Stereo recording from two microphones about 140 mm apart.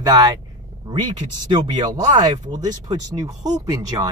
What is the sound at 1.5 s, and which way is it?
Speech, 30° right (ahead or behind).